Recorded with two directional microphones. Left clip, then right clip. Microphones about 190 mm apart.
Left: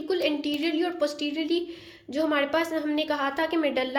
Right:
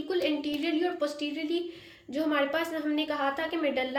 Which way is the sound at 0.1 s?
30° left (ahead or behind).